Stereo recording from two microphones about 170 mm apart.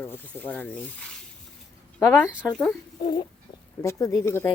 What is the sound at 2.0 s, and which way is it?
Speech, 15° left (ahead or behind).